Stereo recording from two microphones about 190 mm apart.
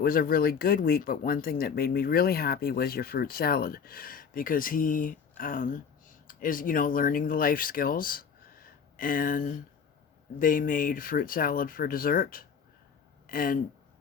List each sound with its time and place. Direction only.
0.0 s speech: 50° left (ahead or behind)